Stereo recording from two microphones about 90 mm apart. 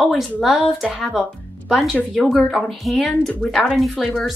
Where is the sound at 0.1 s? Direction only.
Centre (ahead or behind).